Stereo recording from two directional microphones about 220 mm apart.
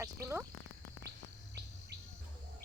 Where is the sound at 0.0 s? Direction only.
10° right (ahead or behind).